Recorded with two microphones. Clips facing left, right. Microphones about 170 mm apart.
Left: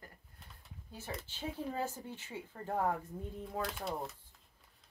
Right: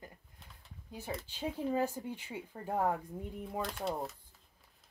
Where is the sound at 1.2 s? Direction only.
15° right (ahead or behind).